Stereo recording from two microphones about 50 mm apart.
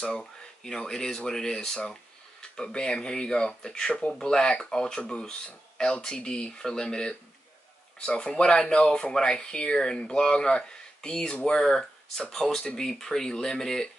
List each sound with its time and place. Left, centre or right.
0.2 s speech: centre